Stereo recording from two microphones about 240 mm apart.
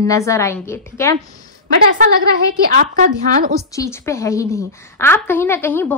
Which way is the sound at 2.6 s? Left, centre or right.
Right.